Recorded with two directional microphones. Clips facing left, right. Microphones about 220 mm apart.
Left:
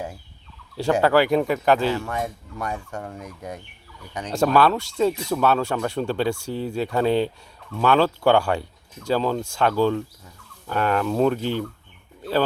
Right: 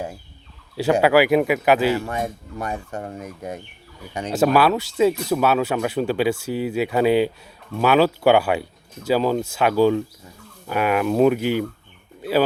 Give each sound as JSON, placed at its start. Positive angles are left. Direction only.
{"t": 0.8, "sound": "speech", "side_deg": -5}
{"t": 2.6, "sound": "speech", "side_deg": -20}
{"t": 3.2, "sound": "speech", "side_deg": -5}